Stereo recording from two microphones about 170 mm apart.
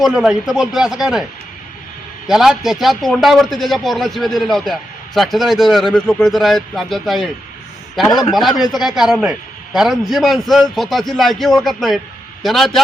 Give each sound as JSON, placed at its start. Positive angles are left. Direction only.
{"t": 0.0, "sound": "speech", "side_deg": -5}
{"t": 2.2, "sound": "speech", "side_deg": 0}
{"t": 8.1, "sound": "a man's voice", "side_deg": 25}
{"t": 8.4, "sound": "a man's voice", "side_deg": 0}